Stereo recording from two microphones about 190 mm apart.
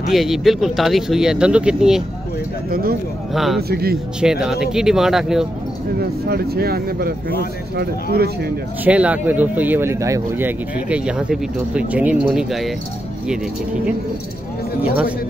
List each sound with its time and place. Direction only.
0.0 s speech: centre (ahead or behind)
2.7 s speech: 50° right (ahead or behind)
3.3 s speech: centre (ahead or behind)
3.6 s speech: 55° right (ahead or behind)
4.2 s speech: 5° right (ahead or behind)
5.9 s speech: 55° right (ahead or behind)
8.8 s speech: 5° right (ahead or behind)
14.8 s speech: 5° right (ahead or behind)